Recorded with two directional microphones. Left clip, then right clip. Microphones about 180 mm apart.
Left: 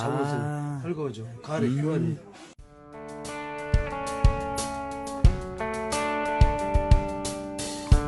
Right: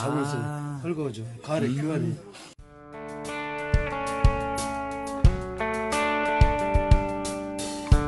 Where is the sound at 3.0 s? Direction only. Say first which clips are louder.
Right 3 dB; centre (ahead or behind).